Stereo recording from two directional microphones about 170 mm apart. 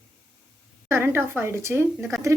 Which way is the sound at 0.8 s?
15° right (ahead or behind).